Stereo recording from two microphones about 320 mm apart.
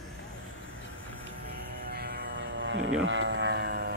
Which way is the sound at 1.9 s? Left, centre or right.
Right.